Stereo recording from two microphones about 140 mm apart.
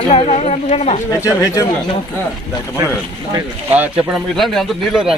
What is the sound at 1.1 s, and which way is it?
Speech, 20° left (ahead or behind).